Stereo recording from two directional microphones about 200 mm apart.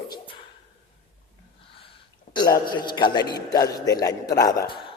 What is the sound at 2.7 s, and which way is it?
A man's voice, 25° left (ahead or behind).